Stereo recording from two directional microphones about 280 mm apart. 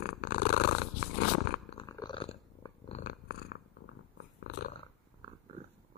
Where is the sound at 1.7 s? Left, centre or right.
Centre; by 4.7 s left.